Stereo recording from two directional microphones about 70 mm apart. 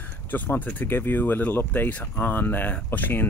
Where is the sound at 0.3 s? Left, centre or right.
Left.